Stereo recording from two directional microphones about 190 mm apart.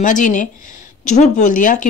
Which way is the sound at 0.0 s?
40° left (ahead or behind).